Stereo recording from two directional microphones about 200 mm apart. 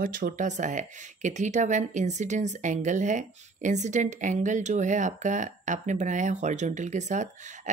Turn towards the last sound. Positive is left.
turn(degrees=-35)  # may be behind; listen again after turning